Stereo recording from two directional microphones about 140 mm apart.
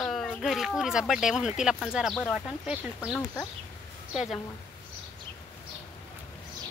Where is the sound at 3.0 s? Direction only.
10° left (ahead or behind).